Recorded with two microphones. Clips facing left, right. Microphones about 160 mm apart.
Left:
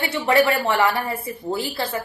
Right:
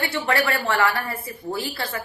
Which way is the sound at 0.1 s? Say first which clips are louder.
Left 8 dB; 20° left (ahead or behind).